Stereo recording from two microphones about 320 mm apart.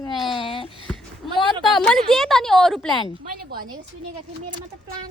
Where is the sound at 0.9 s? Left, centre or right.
Centre.